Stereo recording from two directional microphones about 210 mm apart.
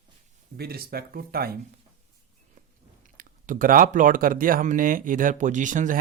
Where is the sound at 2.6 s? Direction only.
40° right (ahead or behind).